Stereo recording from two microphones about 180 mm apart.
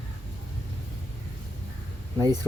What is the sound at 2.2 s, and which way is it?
Speech, 20° right (ahead or behind).